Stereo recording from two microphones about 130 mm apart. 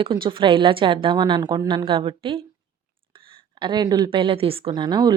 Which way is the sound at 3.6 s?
35° right (ahead or behind).